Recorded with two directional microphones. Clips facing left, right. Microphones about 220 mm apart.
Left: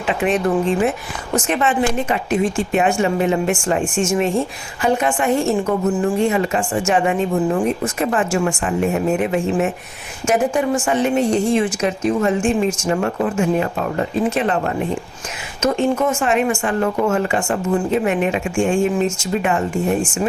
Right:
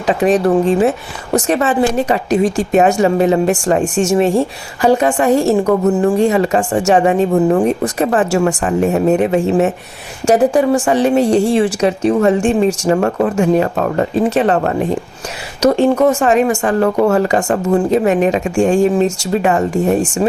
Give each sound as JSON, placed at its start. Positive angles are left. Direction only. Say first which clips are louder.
{"t": 0.1, "sound": "speech", "louder": "right 6 dB", "side_deg": -35}
{"t": 5.5, "sound": "a woman's voice", "louder": "right 6 dB", "side_deg": -70}
{"t": 6.1, "sound": "speech", "louder": "right 5 dB", "side_deg": -35}
{"t": 12.9, "sound": "speech", "louder": "right 5 dB", "side_deg": -45}